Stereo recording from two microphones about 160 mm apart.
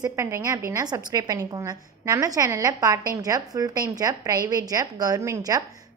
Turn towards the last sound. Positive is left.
turn(degrees=-20)  # may be behind; listen again after turning